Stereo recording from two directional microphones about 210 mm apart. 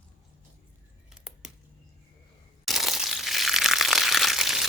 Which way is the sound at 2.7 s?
Centre (ahead or behind).